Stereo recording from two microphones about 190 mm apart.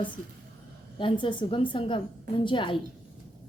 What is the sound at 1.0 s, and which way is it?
A woman's voice, 25° left (ahead or behind).